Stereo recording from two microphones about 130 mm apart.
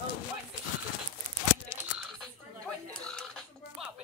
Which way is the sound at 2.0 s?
5° left (ahead or behind).